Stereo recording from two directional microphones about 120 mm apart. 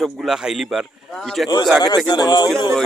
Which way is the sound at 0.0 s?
Centre (ahead or behind).